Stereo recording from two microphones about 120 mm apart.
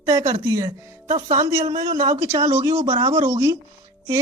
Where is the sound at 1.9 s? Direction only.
65° right (ahead or behind).